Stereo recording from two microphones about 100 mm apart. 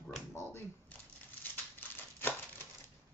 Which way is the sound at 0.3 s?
25° left (ahead or behind).